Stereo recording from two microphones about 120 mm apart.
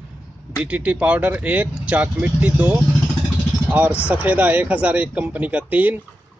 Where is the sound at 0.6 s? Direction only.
10° right (ahead or behind).